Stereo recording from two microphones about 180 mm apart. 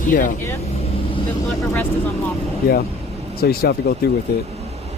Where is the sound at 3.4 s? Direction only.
60° left (ahead or behind).